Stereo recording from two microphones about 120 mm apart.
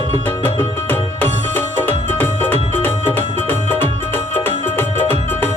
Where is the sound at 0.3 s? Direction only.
15° left (ahead or behind).